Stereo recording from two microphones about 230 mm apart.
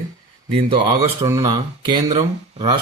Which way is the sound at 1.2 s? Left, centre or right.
Centre.